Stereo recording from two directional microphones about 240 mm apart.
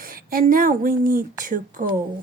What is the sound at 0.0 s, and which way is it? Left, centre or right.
Speech, right.